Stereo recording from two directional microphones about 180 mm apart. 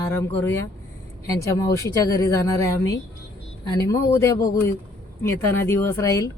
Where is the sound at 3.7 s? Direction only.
20° left (ahead or behind).